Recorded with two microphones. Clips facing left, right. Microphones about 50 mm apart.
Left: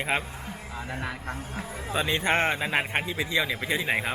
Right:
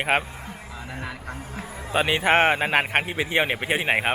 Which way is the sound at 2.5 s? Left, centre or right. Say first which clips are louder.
Right 5 dB; right.